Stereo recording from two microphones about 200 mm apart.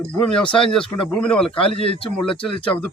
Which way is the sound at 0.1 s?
5° left (ahead or behind).